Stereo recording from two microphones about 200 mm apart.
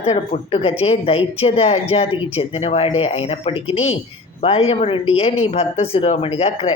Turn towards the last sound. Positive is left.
turn(degrees=30)  # may be behind; listen again after turning